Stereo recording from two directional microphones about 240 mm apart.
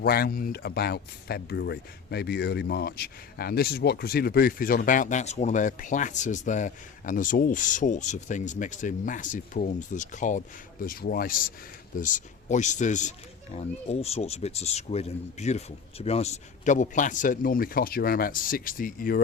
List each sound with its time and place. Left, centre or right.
0.0 s speech: left